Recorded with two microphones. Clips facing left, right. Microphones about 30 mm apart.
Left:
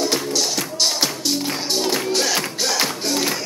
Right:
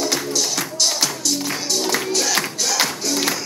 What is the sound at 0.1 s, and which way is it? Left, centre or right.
Music, centre.